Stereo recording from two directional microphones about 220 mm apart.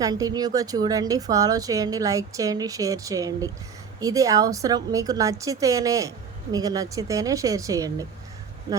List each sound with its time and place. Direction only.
0.0 s a woman's voice: 15° right (ahead or behind)